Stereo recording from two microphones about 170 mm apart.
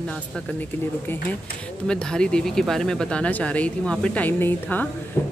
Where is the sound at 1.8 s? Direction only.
5° left (ahead or behind).